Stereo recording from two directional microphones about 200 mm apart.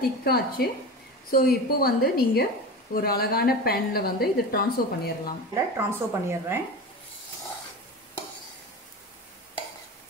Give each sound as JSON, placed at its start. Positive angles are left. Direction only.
{"t": 0.2, "sound": "a woman's voice", "side_deg": 50}
{"t": 5.5, "sound": "a woman's voice", "side_deg": -10}